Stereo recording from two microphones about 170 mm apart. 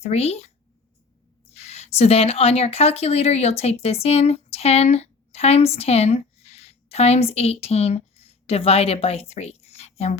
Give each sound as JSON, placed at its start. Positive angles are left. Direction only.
{"t": 0.0, "sound": "speech", "side_deg": 40}
{"t": 1.5, "sound": "speech", "side_deg": 40}